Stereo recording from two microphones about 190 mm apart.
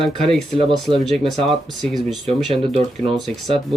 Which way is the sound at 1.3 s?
Centre (ahead or behind).